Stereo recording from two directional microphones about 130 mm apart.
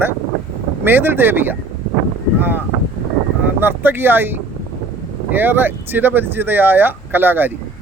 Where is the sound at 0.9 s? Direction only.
15° right (ahead or behind).